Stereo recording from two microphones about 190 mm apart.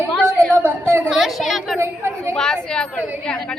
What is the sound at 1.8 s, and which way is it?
Speech, 15° right (ahead or behind).